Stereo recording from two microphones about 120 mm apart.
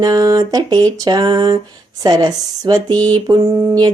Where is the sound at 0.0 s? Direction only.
35° right (ahead or behind).